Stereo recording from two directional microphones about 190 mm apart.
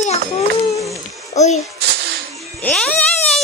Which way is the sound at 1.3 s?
35° left (ahead or behind).